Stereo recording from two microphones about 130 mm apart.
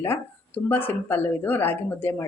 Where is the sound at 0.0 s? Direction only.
15° left (ahead or behind).